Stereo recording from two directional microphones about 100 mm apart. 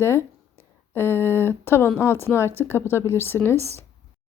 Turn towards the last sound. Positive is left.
turn(degrees=25)  # may be behind; listen again after turning